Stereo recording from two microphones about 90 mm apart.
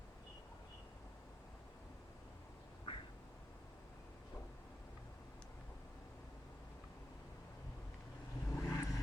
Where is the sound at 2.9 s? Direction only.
75° left (ahead or behind).